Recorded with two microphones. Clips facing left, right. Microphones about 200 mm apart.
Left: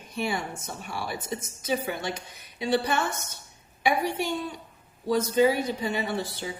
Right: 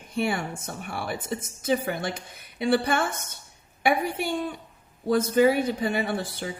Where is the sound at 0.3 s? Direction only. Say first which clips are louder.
Right 2 dB; 55° right (ahead or behind).